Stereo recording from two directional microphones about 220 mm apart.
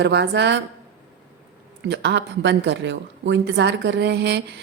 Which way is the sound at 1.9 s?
55° right (ahead or behind).